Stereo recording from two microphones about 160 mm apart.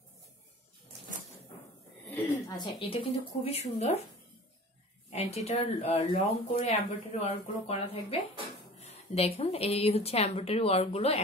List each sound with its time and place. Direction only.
2.0 s a sound: 20° left (ahead or behind)
2.8 s a woman's voice: 35° left (ahead or behind)
5.1 s a woman's voice: 40° left (ahead or behind)